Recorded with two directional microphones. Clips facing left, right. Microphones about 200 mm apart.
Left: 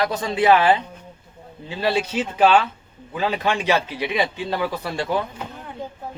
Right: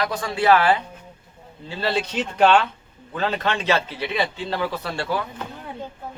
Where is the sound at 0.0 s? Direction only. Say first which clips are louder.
Left 2 dB; 25° left (ahead or behind).